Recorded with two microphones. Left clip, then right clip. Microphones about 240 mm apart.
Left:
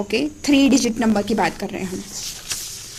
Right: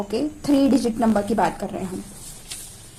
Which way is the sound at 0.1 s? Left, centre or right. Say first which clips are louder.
Left 3 dB; left.